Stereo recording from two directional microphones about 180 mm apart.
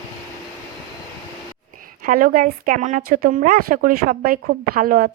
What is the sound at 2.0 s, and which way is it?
A woman's voice, 50° right (ahead or behind).